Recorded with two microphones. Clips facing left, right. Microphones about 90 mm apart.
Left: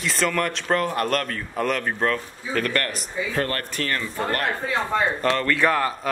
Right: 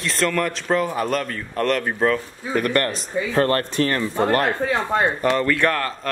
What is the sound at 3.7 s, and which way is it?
Speech, 20° right (ahead or behind).